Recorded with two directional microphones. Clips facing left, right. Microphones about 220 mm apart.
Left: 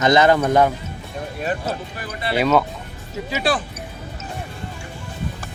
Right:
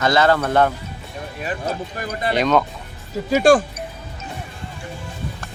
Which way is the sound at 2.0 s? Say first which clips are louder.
Right 4 dB; 45° right (ahead or behind).